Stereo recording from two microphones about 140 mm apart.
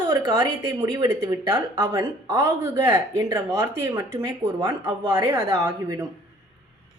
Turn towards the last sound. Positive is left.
turn(degrees=-25)  # may be behind; listen again after turning